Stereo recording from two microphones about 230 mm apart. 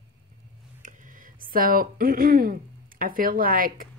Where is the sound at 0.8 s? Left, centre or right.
Right.